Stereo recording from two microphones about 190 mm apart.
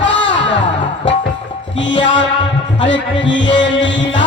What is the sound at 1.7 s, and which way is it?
Music, 75° left (ahead or behind).